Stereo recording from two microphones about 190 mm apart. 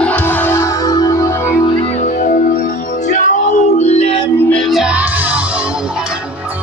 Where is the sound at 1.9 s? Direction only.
40° left (ahead or behind).